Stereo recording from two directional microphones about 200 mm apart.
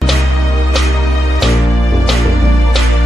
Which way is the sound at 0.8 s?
Centre (ahead or behind).